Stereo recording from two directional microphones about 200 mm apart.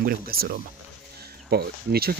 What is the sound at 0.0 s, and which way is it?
Speech, 50° right (ahead or behind).